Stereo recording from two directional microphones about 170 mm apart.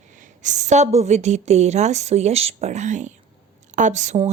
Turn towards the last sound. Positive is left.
turn(degrees=-45)  # may be behind; listen again after turning